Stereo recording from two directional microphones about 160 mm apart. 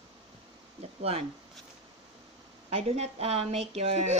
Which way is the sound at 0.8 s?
40° right (ahead or behind).